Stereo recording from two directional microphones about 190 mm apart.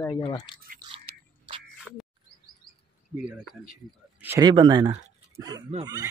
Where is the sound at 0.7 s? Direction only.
30° right (ahead or behind).